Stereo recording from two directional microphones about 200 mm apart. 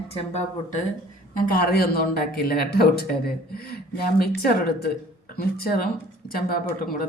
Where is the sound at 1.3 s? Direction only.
45° left (ahead or behind).